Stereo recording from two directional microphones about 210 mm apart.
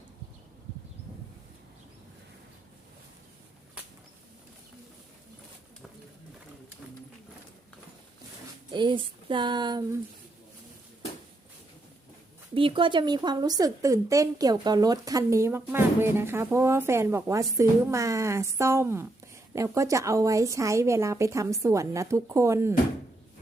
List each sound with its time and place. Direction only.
8.7 s speech: 20° right (ahead or behind)
12.5 s a woman's voice: 25° right (ahead or behind)